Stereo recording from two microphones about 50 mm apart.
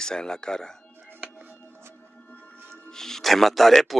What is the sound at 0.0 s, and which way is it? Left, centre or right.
Speech, centre.